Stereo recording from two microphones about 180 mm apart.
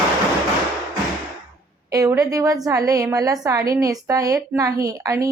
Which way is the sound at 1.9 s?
20° right (ahead or behind).